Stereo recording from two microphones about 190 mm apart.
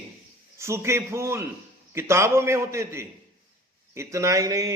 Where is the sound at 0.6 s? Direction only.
15° right (ahead or behind).